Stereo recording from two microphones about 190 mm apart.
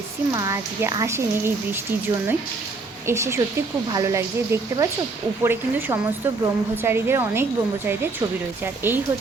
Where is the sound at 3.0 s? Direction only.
15° right (ahead or behind).